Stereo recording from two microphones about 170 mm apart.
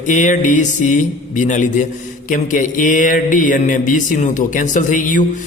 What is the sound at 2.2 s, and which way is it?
Mantra, 50° left (ahead or behind).